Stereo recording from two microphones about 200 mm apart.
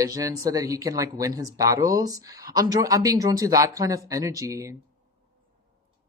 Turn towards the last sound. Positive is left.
turn(degrees=-15)  # may be behind; listen again after turning